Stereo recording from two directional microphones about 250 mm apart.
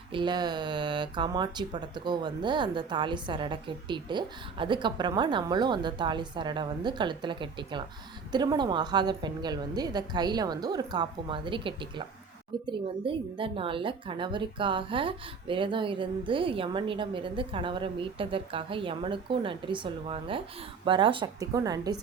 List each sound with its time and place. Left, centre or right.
0.1 s a woman's voice: centre